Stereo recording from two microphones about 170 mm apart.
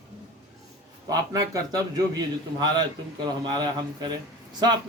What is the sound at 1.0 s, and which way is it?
A man's voice, 20° right (ahead or behind).